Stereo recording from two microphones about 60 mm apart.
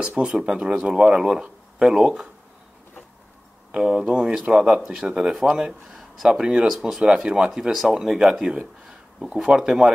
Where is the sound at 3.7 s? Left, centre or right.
Centre.